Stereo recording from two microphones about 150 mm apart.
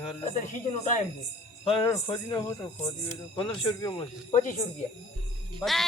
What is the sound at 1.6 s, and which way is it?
Speech, 35° left (ahead or behind).